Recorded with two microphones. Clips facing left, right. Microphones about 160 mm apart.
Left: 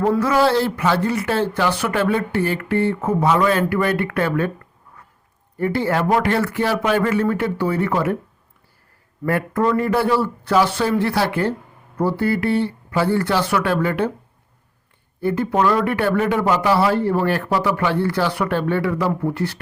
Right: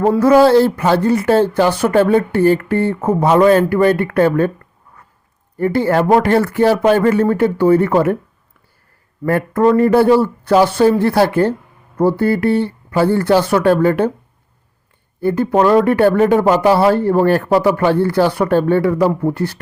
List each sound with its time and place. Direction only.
0.2 s speech: 45° right (ahead or behind)
5.5 s speech: 45° right (ahead or behind)
9.2 s speech: 45° right (ahead or behind)
15.2 s speech: 40° right (ahead or behind)